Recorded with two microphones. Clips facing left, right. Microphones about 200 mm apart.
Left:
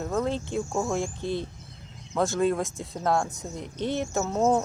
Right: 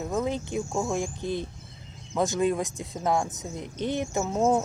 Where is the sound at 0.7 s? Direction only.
Centre (ahead or behind).